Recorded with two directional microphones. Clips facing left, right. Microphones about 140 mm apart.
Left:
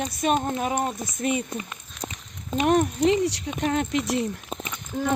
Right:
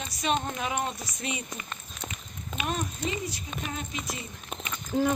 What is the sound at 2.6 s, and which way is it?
Speech, 70° left (ahead or behind).